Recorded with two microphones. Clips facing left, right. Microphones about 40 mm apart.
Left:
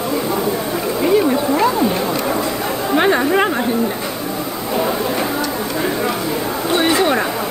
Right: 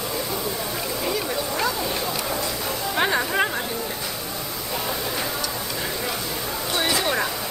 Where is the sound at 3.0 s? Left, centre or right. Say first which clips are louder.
Left 7 dB; left.